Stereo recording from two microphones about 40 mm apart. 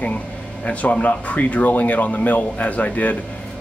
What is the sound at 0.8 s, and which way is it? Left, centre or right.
Speech, left.